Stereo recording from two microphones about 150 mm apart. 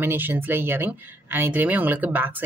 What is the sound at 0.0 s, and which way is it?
Speech, 15° right (ahead or behind).